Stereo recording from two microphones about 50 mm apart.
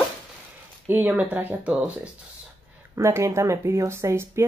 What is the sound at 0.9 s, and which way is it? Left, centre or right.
Speech, right.